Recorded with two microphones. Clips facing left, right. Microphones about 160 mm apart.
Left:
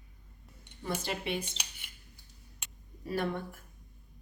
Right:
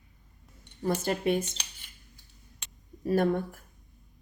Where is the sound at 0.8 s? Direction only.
45° right (ahead or behind).